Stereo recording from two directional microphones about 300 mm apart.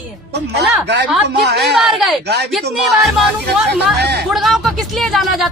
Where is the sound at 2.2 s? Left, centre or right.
Right.